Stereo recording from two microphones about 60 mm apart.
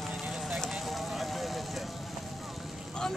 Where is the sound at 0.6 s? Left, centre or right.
Centre.